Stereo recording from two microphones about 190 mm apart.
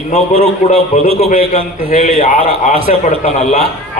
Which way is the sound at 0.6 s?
35° left (ahead or behind).